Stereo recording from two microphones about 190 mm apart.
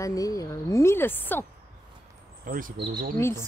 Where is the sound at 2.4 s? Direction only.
45° right (ahead or behind).